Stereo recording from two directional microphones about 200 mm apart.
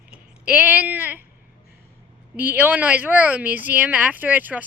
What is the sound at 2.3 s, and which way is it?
A woman's voice, 10° right (ahead or behind).